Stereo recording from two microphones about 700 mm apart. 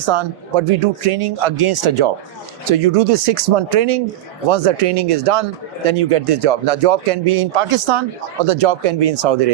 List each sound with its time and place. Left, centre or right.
0.0 s speech: right